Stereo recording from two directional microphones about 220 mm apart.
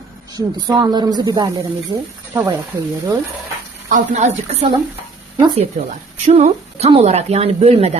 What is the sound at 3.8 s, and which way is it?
A woman's voice, 35° right (ahead or behind).